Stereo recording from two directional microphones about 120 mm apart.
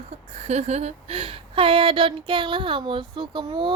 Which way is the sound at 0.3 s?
65° right (ahead or behind).